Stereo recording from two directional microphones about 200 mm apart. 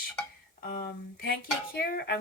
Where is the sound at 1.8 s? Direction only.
55° left (ahead or behind).